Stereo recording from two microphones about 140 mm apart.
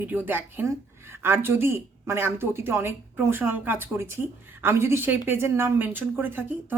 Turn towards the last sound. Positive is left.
turn(degrees=-15)  # may be behind; listen again after turning